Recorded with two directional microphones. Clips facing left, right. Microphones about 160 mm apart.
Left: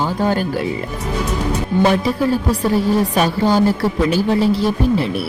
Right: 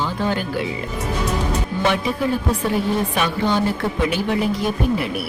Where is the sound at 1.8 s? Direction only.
35° left (ahead or behind).